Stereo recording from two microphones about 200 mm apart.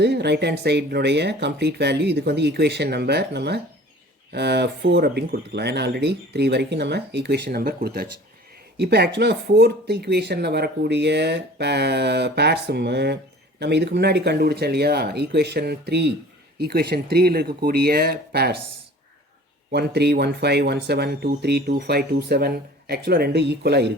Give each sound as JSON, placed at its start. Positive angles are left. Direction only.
{"t": 0.0, "sound": "speech", "side_deg": -55}
{"t": 19.7, "sound": "speech", "side_deg": -55}